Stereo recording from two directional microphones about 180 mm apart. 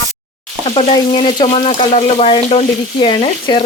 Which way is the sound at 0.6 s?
35° left (ahead or behind).